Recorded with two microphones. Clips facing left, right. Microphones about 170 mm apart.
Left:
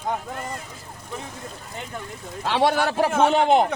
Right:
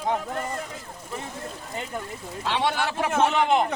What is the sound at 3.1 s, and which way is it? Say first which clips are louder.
Speech: even; centre (ahead or behind).